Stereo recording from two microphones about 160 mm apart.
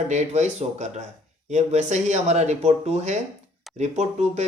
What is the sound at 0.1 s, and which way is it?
Speech, 45° right (ahead or behind).